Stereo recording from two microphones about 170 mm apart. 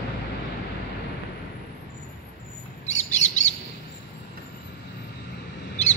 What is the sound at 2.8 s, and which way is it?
Bird, 45° left (ahead or behind).